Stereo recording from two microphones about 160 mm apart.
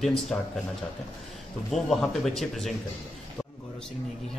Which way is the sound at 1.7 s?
Centre (ahead or behind).